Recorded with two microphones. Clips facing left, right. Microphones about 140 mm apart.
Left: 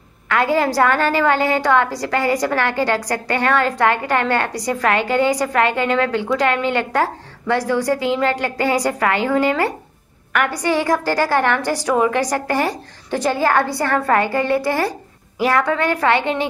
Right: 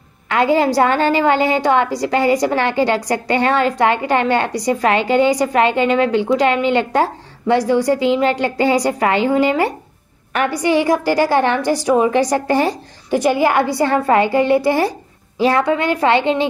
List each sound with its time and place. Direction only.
0.3 s a woman's voice: 20° right (ahead or behind)